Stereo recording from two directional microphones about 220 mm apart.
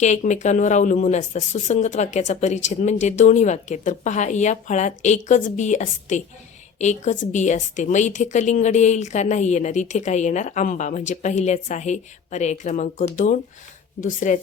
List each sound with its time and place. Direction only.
0.0 s a woman's voice: 30° left (ahead or behind)